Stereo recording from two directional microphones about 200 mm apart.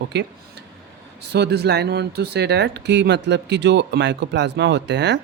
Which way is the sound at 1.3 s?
55° right (ahead or behind).